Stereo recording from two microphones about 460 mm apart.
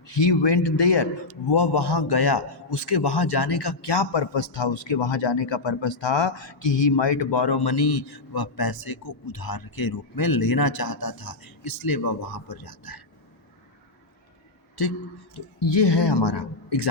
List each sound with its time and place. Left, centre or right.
0.1 s a man's voice: left
14.8 s speech: left
15.4 s a man's voice: left